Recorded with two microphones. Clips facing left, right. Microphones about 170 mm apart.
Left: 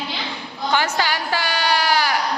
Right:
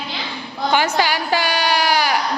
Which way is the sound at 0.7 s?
15° right (ahead or behind).